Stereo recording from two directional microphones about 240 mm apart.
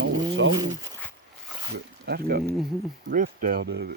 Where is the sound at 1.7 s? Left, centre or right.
Right.